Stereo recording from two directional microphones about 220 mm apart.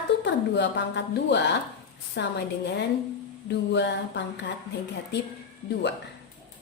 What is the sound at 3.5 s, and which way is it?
Speech, 55° left (ahead or behind).